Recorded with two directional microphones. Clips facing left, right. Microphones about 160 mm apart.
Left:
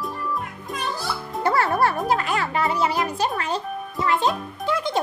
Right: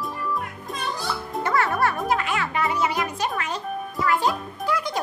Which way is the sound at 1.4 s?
35° left (ahead or behind).